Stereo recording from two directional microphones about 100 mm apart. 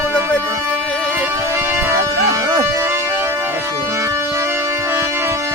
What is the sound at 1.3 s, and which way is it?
Music, 30° right (ahead or behind).